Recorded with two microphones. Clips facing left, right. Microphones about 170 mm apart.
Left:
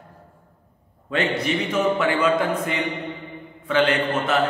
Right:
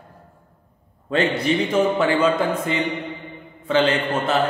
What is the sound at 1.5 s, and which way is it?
A man's voice, 30° right (ahead or behind).